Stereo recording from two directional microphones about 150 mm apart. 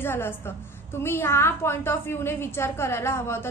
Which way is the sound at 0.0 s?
15° left (ahead or behind).